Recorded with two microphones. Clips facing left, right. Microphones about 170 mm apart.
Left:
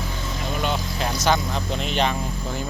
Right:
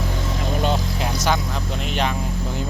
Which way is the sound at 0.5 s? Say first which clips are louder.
Right 3 dB; 35° right (ahead or behind).